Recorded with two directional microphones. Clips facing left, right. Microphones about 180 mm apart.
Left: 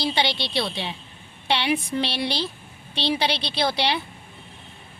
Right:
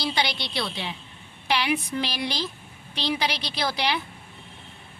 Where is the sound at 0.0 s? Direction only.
25° left (ahead or behind).